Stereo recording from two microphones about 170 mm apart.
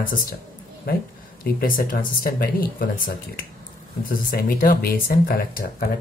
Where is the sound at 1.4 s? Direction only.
60° left (ahead or behind).